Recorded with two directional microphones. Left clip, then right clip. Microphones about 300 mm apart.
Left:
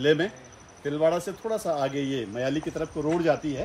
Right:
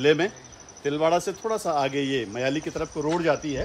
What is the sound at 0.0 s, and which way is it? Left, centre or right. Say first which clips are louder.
Speech: right 2 dB; right.